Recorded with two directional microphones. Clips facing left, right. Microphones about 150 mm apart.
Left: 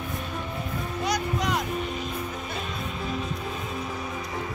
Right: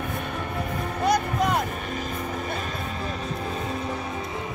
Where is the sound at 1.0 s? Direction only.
55° right (ahead or behind).